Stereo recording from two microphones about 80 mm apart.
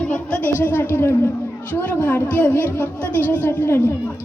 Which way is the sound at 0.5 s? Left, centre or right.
Left.